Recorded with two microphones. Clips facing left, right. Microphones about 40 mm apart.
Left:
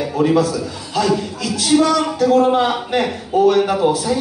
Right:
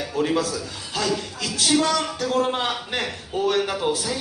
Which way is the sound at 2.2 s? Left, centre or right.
Centre.